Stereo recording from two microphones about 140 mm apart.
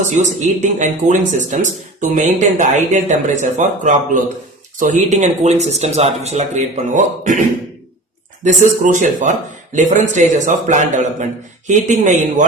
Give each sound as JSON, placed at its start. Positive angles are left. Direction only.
{"t": 0.2, "sound": "a man's voice", "side_deg": -60}
{"t": 8.4, "sound": "speech", "side_deg": -60}